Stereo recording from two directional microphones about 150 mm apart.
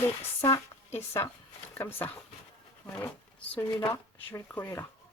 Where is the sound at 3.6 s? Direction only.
20° left (ahead or behind).